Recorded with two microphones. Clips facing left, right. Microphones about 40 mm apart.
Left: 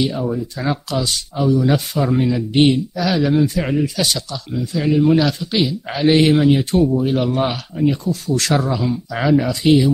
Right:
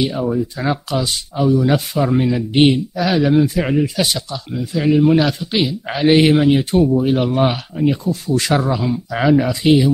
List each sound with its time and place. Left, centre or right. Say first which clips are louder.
0.0 s speech: right 2 dB; centre